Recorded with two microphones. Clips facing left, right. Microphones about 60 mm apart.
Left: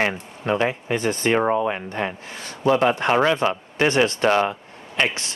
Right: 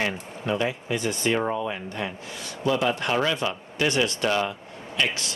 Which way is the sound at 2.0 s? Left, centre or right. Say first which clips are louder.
Left 5 dB; left.